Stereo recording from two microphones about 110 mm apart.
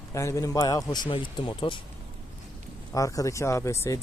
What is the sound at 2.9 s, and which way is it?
Speech, 30° left (ahead or behind).